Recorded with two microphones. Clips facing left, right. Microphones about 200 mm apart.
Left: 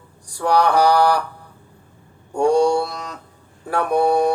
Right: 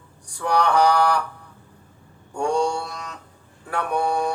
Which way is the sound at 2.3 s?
35° left (ahead or behind).